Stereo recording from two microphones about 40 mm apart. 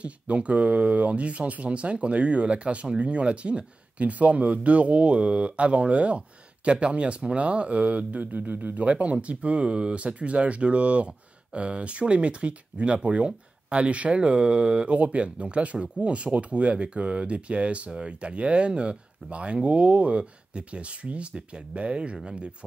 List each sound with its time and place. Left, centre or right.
0.0 s speech: right